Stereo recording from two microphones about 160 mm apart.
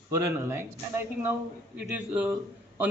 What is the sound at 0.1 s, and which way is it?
Speech, 20° right (ahead or behind).